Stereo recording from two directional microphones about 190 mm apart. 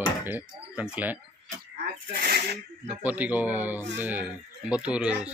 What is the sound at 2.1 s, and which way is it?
Speech, 55° right (ahead or behind).